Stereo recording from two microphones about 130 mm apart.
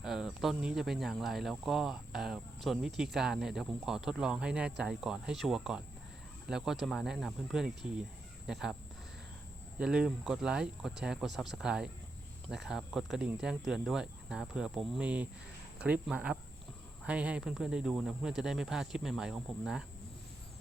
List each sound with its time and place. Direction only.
0.0 s speech: 5° right (ahead or behind)
9.8 s speech: 5° right (ahead or behind)